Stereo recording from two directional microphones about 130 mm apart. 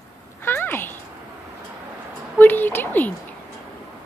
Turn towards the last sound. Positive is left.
turn(degrees=15)  # may be behind; listen again after turning